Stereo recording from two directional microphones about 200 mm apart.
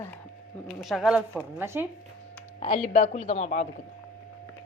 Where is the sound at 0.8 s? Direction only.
Centre (ahead or behind).